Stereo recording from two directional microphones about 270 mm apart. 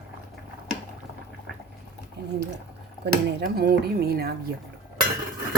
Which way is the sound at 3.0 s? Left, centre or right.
Right.